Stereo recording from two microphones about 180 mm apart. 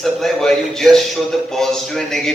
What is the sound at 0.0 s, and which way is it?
A man's voice, centre (ahead or behind).